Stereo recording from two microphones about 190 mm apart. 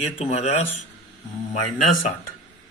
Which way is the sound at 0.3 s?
40° left (ahead or behind).